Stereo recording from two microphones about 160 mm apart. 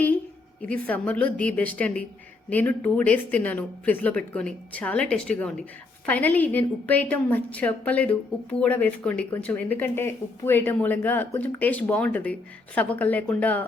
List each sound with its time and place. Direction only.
0.6 s a woman's voice: 10° left (ahead or behind)